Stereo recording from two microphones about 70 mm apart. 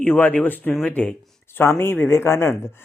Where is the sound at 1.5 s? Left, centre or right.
Left.